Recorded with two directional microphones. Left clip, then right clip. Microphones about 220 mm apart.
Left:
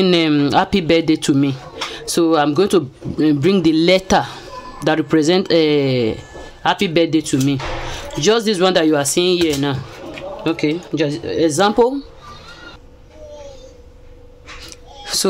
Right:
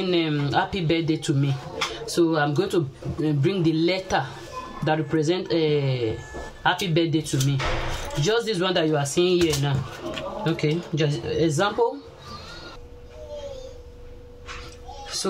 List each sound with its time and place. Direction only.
0.0 s a man's voice: 50° left (ahead or behind)
7.5 s speech: 15° right (ahead or behind)
8.2 s a man's voice: 50° left (ahead or behind)